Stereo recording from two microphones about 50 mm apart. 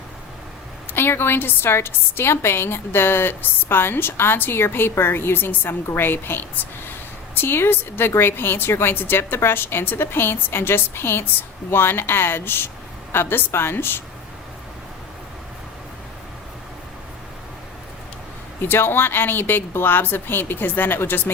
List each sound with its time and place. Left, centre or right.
0.9 s a woman's voice: left
18.6 s a woman's voice: left